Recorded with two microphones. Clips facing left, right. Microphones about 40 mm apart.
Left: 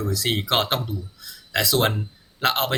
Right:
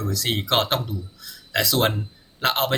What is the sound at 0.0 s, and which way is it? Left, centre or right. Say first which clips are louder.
Speech: left 1 dB; centre.